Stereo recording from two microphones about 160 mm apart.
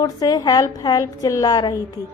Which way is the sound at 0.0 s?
25° left (ahead or behind).